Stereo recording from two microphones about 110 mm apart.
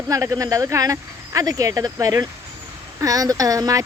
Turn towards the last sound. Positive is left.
turn(degrees=-30)  # may be behind; listen again after turning